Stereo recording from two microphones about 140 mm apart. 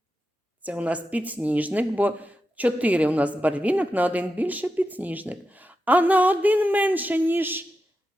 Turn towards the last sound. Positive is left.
turn(degrees=-15)  # may be behind; listen again after turning